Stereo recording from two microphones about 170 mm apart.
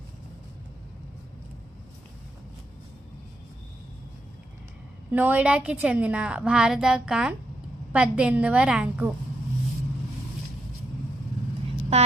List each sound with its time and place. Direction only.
5.1 s a woman's voice: 10° right (ahead or behind)
11.9 s speech: 40° right (ahead or behind)